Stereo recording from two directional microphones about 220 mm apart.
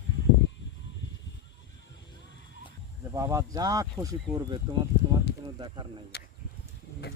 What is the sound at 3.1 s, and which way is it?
Speech, 15° right (ahead or behind).